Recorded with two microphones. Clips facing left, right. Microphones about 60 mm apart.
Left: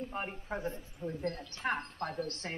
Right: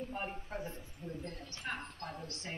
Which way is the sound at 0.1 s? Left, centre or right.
Left.